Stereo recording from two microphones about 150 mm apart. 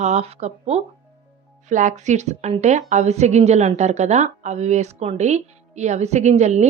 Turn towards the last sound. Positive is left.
turn(degrees=-50)  # may be behind; listen again after turning